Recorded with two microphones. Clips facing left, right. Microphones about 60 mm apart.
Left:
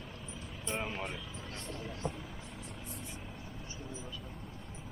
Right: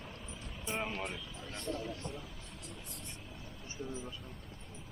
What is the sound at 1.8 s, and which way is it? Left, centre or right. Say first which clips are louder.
Speech: left 2 dB; centre.